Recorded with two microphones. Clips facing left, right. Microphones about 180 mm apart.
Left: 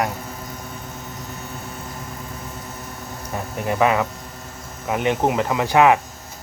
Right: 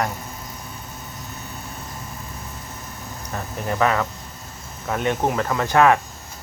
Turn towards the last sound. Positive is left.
turn(degrees=15)  # may be behind; listen again after turning